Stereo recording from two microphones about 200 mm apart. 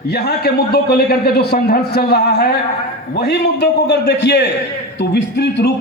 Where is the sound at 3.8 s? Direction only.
60° left (ahead or behind).